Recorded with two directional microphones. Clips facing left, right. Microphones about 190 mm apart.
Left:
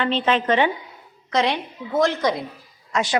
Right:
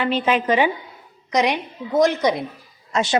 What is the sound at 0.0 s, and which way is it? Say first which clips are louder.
A woman's voice: right 1 dB; 10° right (ahead or behind).